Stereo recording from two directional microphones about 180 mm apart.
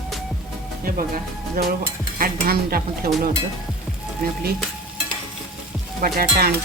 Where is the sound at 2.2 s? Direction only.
50° right (ahead or behind).